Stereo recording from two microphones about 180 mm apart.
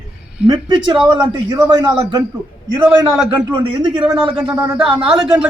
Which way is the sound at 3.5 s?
25° right (ahead or behind).